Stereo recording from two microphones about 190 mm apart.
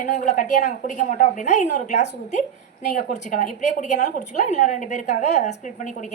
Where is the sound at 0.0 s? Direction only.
40° left (ahead or behind).